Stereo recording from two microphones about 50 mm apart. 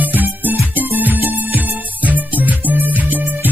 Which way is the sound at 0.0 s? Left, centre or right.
Right.